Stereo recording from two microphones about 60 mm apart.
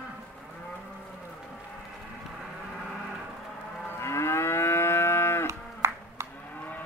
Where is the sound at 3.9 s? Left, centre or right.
Left.